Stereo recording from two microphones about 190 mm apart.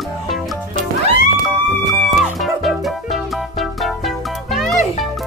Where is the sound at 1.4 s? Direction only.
Centre (ahead or behind).